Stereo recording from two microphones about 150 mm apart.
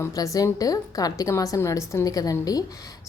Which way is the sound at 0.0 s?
20° left (ahead or behind).